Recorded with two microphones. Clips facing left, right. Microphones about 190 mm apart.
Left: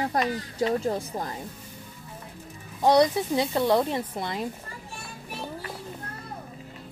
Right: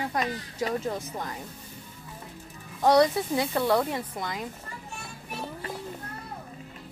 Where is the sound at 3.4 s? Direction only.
20° left (ahead or behind).